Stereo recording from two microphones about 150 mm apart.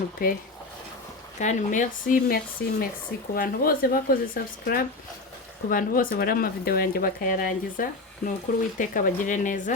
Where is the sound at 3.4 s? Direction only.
75° left (ahead or behind).